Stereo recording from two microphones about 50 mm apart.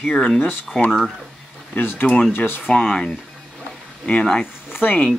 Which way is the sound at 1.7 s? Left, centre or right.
Left.